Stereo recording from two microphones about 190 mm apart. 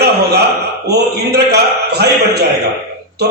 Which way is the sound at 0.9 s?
60° right (ahead or behind).